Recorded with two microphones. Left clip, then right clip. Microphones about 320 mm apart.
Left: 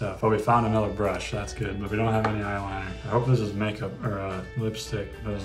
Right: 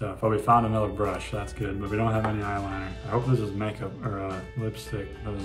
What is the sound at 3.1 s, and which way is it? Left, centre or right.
Speech, centre.